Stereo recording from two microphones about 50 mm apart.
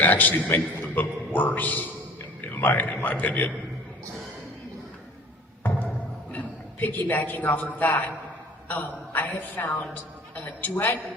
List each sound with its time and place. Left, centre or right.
0.0 s a man's voice: left
6.3 s a sound: left
7.5 s a man's voice: left